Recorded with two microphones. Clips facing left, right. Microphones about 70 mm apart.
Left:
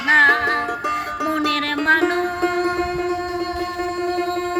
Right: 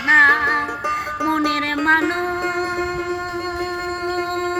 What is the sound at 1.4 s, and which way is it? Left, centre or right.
Music, right.